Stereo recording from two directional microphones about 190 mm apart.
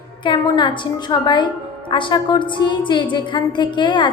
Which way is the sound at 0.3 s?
25° left (ahead or behind).